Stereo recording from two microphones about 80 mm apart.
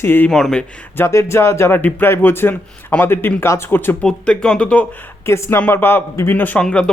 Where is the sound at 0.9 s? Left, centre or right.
Left.